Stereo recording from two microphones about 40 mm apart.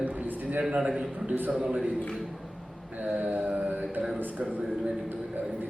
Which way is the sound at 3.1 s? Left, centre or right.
Right.